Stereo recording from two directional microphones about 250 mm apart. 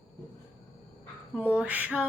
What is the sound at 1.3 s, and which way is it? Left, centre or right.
Speech, centre.